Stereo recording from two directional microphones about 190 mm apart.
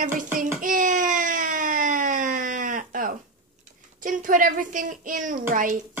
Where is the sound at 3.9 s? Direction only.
45° right (ahead or behind).